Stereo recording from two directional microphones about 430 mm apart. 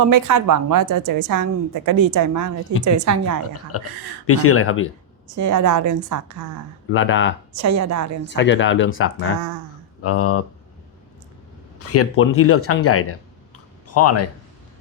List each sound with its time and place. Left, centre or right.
0.1 s a woman's voice: right
3.7 s speech: left
5.4 s a woman's voice: right
6.9 s speech: left
7.5 s a woman's voice: right
8.3 s speech: left
11.9 s speech: left